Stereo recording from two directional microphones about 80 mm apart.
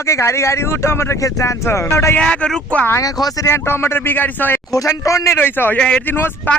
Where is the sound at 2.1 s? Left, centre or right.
Centre.